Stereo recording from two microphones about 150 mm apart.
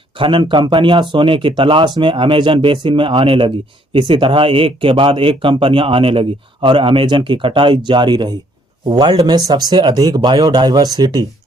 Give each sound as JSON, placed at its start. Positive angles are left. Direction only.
{"t": 0.2, "sound": "speech", "side_deg": -35}